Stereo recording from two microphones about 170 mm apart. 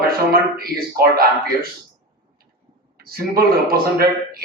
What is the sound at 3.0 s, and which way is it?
A man's voice, 65° right (ahead or behind).